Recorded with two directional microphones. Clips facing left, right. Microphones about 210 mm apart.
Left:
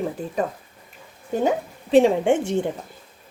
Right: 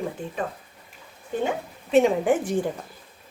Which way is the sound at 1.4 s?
35° left (ahead or behind).